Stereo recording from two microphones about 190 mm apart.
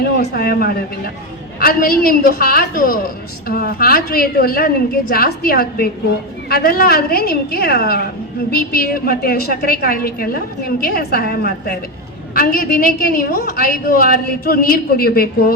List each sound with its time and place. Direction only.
0.3 s a woman's voice: 50° left (ahead or behind)